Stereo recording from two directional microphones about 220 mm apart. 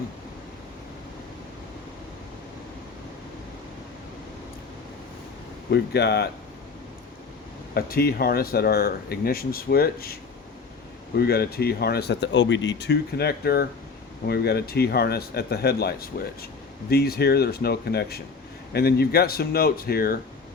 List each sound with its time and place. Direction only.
5.7 s speech: 50° left (ahead or behind)
7.7 s speech: 45° left (ahead or behind)